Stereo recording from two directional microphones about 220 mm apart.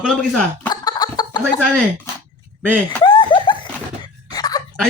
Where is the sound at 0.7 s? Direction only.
20° left (ahead or behind).